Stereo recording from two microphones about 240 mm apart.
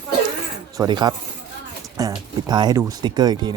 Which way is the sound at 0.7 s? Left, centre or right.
Centre.